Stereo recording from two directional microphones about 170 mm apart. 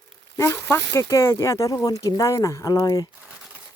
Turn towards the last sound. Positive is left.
turn(degrees=20)  # may be behind; listen again after turning